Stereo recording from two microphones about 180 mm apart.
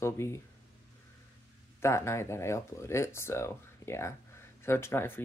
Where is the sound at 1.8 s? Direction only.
15° left (ahead or behind).